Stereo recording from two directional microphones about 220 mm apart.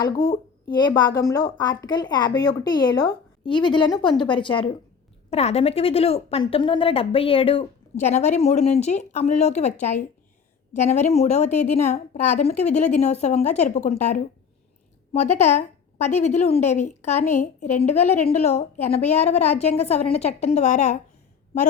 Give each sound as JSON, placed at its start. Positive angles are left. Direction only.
{"t": 0.0, "sound": "a woman's voice", "side_deg": 20}
{"t": 10.8, "sound": "a woman's voice", "side_deg": 30}